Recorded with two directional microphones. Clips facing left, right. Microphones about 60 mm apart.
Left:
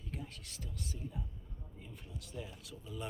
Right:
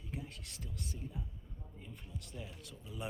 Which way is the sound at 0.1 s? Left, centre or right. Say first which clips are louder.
Even; centre.